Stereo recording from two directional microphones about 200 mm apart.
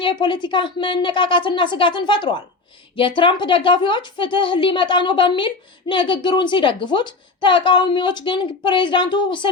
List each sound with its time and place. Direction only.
0.0 s a woman's voice: 25° left (ahead or behind)